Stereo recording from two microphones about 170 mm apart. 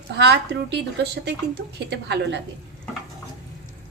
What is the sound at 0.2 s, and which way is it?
A woman's voice, 80° right.